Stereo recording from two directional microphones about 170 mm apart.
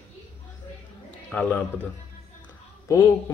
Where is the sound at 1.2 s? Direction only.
10° left (ahead or behind).